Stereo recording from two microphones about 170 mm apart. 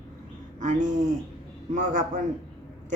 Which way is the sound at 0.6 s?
50° right (ahead or behind).